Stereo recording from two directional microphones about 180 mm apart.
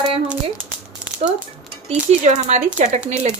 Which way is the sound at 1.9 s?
40° right (ahead or behind).